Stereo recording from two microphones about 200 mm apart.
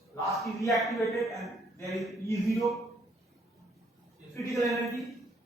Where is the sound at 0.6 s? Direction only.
Centre (ahead or behind).